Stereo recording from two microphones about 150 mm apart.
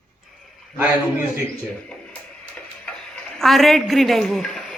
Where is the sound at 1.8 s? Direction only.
10° left (ahead or behind).